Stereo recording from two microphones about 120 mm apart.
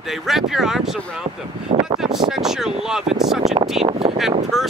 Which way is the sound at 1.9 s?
5° right (ahead or behind).